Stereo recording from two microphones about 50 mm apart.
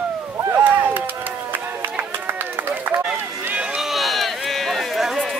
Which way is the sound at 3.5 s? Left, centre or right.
Centre.